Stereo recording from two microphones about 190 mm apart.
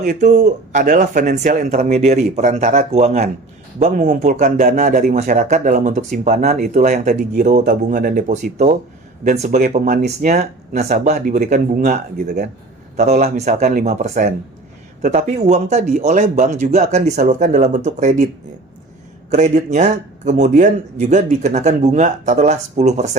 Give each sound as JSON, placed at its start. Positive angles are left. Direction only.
{"t": 0.0, "sound": "speech", "side_deg": -40}
{"t": 19.3, "sound": "speech", "side_deg": -40}